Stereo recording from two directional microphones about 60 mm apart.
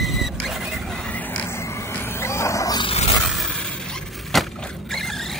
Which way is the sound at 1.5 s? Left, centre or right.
Left.